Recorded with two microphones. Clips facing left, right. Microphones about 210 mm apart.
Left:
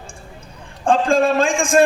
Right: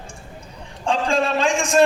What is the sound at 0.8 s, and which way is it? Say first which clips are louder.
Speech: left 5 dB; 50° left (ahead or behind).